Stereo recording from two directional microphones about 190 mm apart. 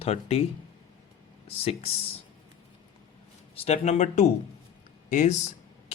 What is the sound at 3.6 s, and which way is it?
Speech, 35° left (ahead or behind).